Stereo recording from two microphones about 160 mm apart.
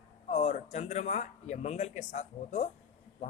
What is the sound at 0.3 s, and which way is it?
Speech, 45° left (ahead or behind).